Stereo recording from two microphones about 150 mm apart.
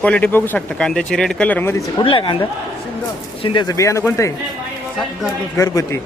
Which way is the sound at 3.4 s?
30° left (ahead or behind).